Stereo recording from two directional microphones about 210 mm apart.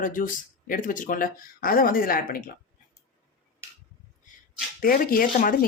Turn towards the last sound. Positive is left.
turn(degrees=40)  # may be behind; listen again after turning